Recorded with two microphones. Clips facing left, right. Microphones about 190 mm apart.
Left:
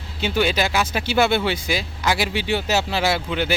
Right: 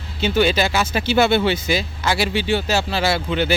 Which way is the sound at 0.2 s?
10° left (ahead or behind).